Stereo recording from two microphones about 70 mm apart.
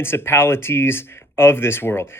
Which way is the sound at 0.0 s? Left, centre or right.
Left.